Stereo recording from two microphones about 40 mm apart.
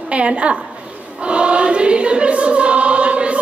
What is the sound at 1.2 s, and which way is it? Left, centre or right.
Choir, right.